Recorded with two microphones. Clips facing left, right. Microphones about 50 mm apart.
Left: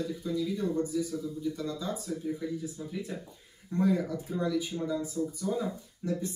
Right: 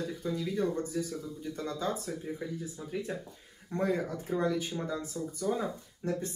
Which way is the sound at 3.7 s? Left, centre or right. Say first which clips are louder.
Left 3 dB; right.